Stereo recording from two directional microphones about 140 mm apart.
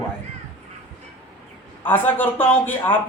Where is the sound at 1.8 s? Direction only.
15° left (ahead or behind).